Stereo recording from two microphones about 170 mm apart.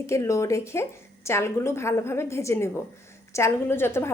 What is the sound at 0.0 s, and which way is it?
A woman's voice, 15° left (ahead or behind).